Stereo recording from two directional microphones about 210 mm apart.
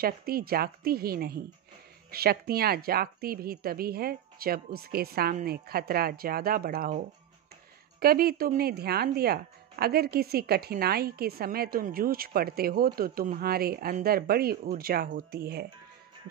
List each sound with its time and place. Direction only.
0.0 s speech: 45° right (ahead or behind)
8.0 s speech: 45° right (ahead or behind)